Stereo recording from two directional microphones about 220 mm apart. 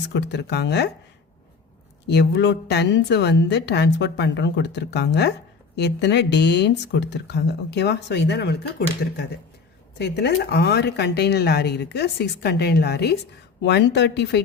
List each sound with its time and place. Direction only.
0.1 s a woman's voice: 50° left (ahead or behind)
2.0 s a woman's voice: 50° left (ahead or behind)
10.0 s a woman's voice: 50° left (ahead or behind)